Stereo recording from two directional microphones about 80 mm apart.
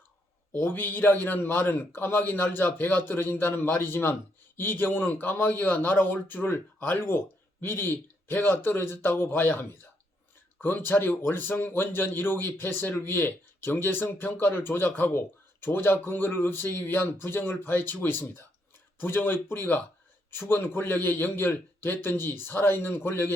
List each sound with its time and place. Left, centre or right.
0.6 s a man's voice: left